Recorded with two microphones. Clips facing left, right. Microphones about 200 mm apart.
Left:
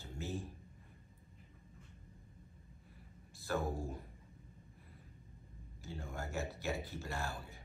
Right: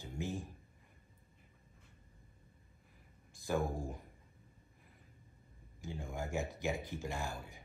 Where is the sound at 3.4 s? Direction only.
15° right (ahead or behind).